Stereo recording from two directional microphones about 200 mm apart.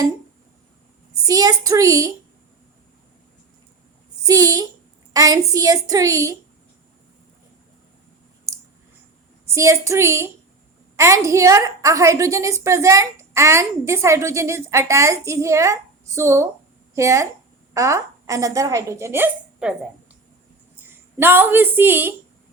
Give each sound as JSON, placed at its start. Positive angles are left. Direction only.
{"t": 1.2, "sound": "a woman's voice", "side_deg": -20}
{"t": 4.3, "sound": "a woman's voice", "side_deg": -20}
{"t": 9.6, "sound": "a woman's voice", "side_deg": -15}